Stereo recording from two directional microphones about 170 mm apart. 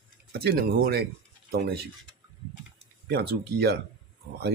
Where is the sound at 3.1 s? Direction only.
70° right (ahead or behind).